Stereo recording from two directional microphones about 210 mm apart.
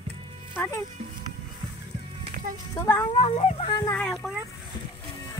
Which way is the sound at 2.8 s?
10° left (ahead or behind).